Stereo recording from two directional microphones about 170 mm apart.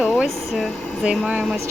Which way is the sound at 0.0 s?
Centre (ahead or behind).